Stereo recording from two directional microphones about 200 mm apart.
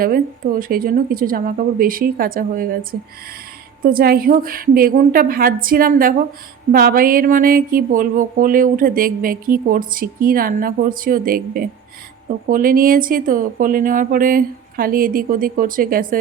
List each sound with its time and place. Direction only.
0.0 s speech: 45° right (ahead or behind)
3.8 s speech: 45° right (ahead or behind)